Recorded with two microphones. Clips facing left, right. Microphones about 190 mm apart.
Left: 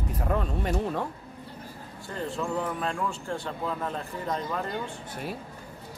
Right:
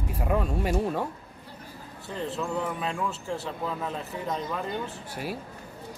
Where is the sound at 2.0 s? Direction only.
Centre (ahead or behind).